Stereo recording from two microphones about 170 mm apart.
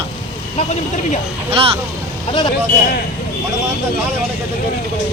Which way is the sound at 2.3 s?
25° left (ahead or behind).